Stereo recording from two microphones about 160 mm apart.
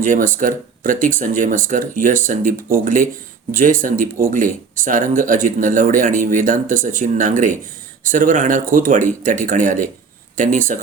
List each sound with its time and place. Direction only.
0.0 s speech: 55° right (ahead or behind)